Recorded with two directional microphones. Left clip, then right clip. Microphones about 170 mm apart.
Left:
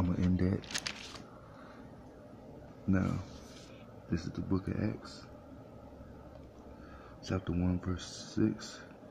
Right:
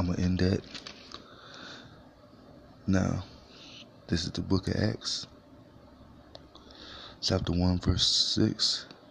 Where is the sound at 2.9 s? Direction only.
30° right (ahead or behind).